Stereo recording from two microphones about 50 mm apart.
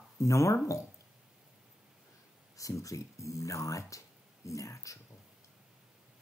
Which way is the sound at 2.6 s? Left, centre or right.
Left.